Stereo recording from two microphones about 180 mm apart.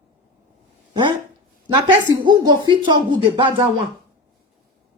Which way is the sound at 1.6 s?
25° right (ahead or behind).